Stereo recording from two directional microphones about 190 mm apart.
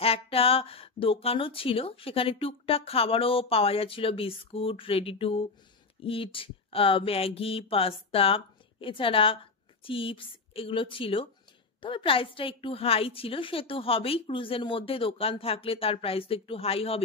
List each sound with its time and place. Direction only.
0.0 s speech: 30° left (ahead or behind)